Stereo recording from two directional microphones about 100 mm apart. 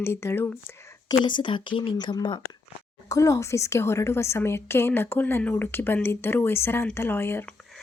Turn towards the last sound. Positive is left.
turn(degrees=20)  # may be behind; listen again after turning